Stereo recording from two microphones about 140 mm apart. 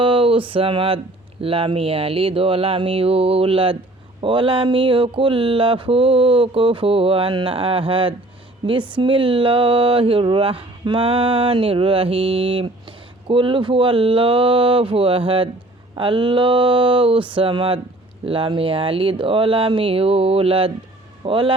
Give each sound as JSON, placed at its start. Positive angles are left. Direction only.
{"t": 0.0, "sound": "mantra", "side_deg": -40}
{"t": 11.0, "sound": "a sound", "side_deg": -50}
{"t": 11.5, "sound": "mantra", "side_deg": -40}